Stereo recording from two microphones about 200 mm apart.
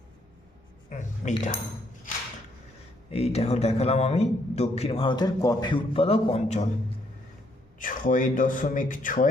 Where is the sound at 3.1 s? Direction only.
30° left (ahead or behind).